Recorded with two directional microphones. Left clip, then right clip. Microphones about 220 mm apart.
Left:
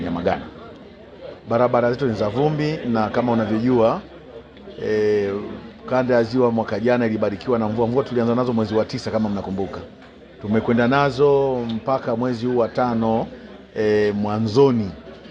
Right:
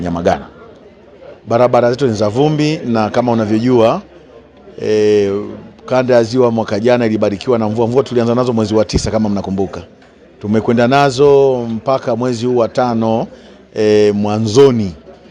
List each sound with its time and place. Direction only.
0.0 s a man's voice: 55° right (ahead or behind)
1.5 s speech: 50° right (ahead or behind)